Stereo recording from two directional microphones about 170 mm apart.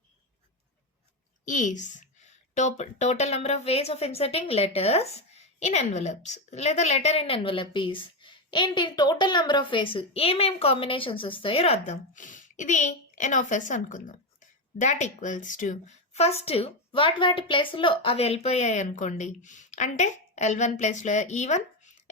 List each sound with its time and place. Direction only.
1.5 s a woman's voice: 45° left (ahead or behind)